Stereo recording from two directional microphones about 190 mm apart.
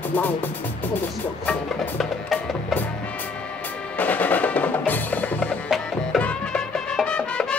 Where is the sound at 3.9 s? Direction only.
10° left (ahead or behind).